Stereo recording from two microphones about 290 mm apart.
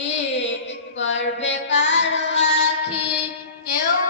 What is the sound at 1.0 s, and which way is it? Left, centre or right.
Child singing, left.